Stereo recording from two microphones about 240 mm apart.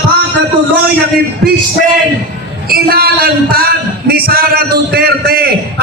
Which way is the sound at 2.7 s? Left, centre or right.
Right.